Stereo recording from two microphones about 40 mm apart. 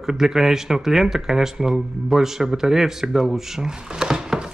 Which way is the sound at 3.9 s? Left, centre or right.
Centre.